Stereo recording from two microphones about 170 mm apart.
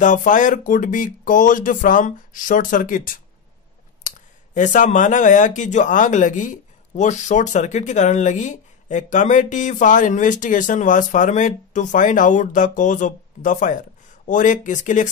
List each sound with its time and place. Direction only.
0.0 s speech: 50° left (ahead or behind)
4.6 s speech: 45° left (ahead or behind)